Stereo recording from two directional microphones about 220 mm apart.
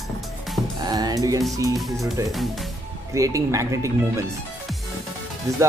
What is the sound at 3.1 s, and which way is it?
Speech, 15° right (ahead or behind).